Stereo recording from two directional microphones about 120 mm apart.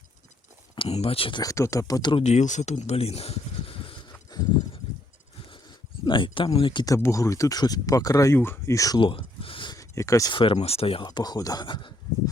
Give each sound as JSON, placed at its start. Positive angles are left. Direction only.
{"t": 0.9, "sound": "speech", "side_deg": 55}
{"t": 1.4, "sound": "speech", "side_deg": 25}
{"t": 2.2, "sound": "speech", "side_deg": 80}
{"t": 4.3, "sound": "a sound", "side_deg": 35}
{"t": 6.1, "sound": "speech", "side_deg": 45}
{"t": 6.8, "sound": "speech", "side_deg": 25}
{"t": 9.0, "sound": "a sound", "side_deg": 45}
{"t": 9.7, "sound": "speech", "side_deg": 25}
{"t": 10.3, "sound": "speech", "side_deg": 45}